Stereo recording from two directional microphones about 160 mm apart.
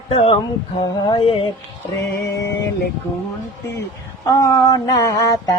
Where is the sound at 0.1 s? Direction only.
35° left (ahead or behind).